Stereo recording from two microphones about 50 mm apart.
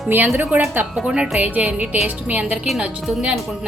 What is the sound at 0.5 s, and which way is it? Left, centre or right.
A woman's voice, right.